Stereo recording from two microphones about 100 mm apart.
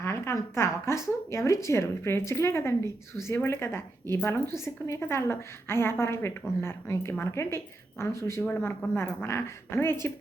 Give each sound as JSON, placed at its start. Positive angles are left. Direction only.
{"t": 0.0, "sound": "a woman's voice", "side_deg": 25}
{"t": 9.0, "sound": "a woman's voice", "side_deg": 25}